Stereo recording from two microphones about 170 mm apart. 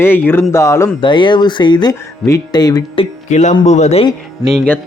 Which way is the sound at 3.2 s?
45° left (ahead or behind).